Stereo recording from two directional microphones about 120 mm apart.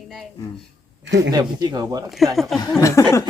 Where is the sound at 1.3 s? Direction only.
35° right (ahead or behind).